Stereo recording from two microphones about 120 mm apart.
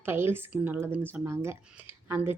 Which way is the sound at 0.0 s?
20° right (ahead or behind).